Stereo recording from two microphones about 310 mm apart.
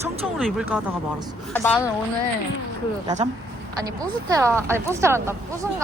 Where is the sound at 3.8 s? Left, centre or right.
Centre.